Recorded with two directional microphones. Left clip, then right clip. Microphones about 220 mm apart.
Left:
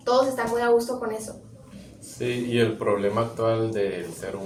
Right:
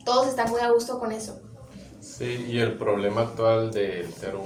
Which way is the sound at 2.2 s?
20° left (ahead or behind).